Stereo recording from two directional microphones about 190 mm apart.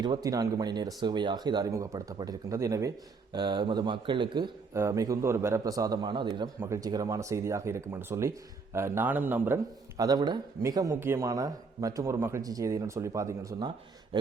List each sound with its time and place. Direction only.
0.0 s speech: 20° right (ahead or behind)
10.0 s speech: 20° right (ahead or behind)